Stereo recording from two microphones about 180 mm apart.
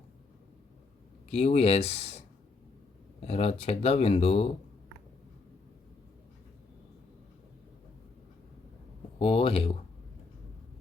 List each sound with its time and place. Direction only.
1.3 s speech: 35° left (ahead or behind)
9.1 s speech: 30° left (ahead or behind)